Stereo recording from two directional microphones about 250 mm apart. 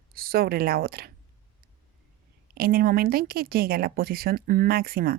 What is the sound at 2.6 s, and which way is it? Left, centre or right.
A woman's voice, right.